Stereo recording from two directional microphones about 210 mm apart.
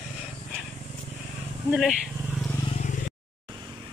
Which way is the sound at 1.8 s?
Centre (ahead or behind).